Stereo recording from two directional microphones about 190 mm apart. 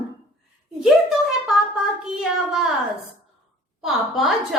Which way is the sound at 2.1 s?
Centre (ahead or behind).